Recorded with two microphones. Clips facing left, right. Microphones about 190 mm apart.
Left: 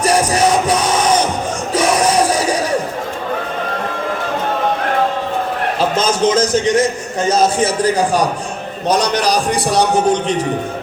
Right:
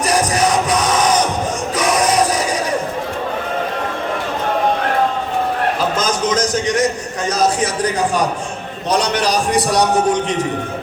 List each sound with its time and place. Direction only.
0.0 s music: 30° left (ahead or behind)
1.7 s a sound: 30° left (ahead or behind)
6.0 s a man's voice: 25° left (ahead or behind)
9.2 s a man's voice: 30° left (ahead or behind)